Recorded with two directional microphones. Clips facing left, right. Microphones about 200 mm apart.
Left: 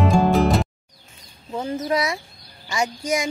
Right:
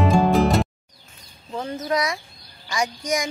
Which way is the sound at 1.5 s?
10° left (ahead or behind).